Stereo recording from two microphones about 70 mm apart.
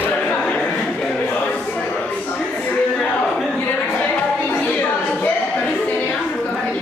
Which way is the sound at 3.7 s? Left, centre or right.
Left.